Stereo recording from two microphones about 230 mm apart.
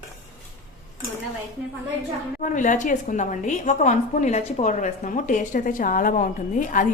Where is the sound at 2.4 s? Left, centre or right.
Left.